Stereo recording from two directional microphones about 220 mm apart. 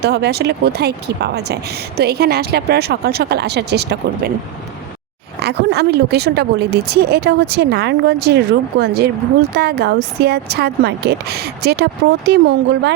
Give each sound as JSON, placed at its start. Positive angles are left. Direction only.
{"t": 0.0, "sound": "speech", "side_deg": -50}
{"t": 5.4, "sound": "speech", "side_deg": -50}